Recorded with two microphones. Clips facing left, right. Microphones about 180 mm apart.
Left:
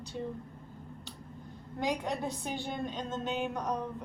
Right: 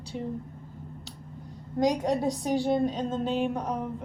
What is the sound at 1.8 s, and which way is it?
A woman's voice, 40° right (ahead or behind).